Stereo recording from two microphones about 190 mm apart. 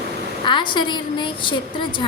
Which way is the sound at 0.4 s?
25° left (ahead or behind).